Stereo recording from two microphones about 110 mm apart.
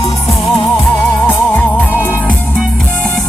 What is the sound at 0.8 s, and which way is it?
Music, 20° left (ahead or behind).